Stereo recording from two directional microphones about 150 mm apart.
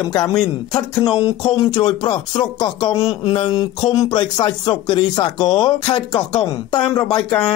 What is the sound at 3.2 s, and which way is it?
Speech, 40° left (ahead or behind).